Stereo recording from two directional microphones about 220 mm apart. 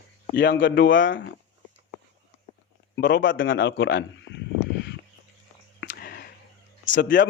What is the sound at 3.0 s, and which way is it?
Speech, 55° left (ahead or behind).